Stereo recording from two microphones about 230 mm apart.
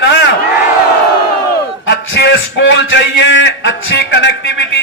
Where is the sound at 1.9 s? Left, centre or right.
Left.